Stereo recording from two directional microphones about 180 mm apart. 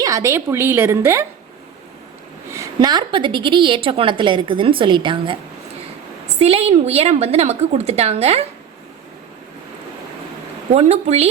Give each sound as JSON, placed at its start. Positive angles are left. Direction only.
{"t": 0.0, "sound": "a woman's voice", "side_deg": -15}
{"t": 2.5, "sound": "a woman's voice", "side_deg": -20}
{"t": 6.4, "sound": "a woman's voice", "side_deg": -35}
{"t": 10.7, "sound": "a woman's voice", "side_deg": -35}